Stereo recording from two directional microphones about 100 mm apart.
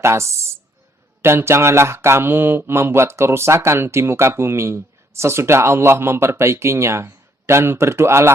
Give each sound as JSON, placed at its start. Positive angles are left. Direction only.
{"t": 0.0, "sound": "speech", "side_deg": -25}